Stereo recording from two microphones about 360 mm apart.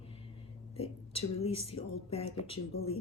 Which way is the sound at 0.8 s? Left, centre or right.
Centre.